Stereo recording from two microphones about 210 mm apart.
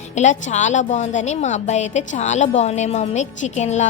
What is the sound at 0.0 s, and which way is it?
A woman's voice, 35° left (ahead or behind).